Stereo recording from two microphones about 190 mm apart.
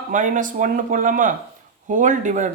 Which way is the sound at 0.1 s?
45° right (ahead or behind).